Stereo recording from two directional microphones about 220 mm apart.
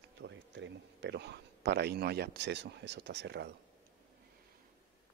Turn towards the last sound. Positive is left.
turn(degrees=-50)  # may be behind; listen again after turning